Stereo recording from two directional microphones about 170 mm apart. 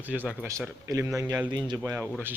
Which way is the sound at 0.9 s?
20° right (ahead or behind).